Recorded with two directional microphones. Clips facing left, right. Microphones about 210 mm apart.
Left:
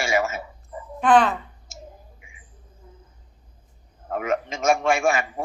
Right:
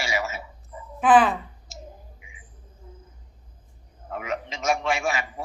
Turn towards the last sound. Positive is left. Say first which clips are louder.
# left 5 dB
turn(degrees=50)  # may be behind; listen again after turning